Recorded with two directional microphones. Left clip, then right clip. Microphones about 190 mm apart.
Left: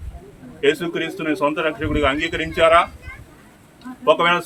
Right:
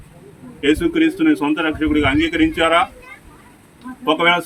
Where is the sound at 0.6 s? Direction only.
20° left (ahead or behind).